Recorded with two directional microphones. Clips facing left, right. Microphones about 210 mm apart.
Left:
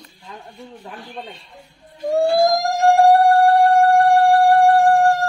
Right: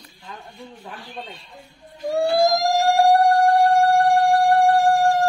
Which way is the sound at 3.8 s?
55° left (ahead or behind).